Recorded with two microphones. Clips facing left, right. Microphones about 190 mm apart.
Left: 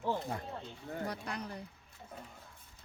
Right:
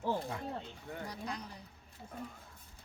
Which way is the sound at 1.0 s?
60° left (ahead or behind).